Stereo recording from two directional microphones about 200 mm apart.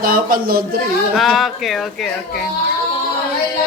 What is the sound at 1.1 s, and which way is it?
Speech, centre (ahead or behind).